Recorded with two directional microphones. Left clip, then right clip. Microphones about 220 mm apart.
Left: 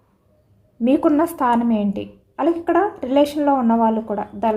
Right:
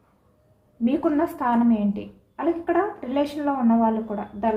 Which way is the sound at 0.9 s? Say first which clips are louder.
Left 6 dB; 50° left (ahead or behind).